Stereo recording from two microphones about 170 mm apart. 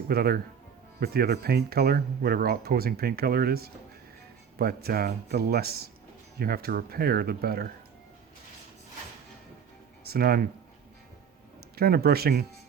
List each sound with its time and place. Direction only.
0.1 s speech: 60° right (ahead or behind)
10.1 s speech: 60° right (ahead or behind)
11.8 s speech: 65° right (ahead or behind)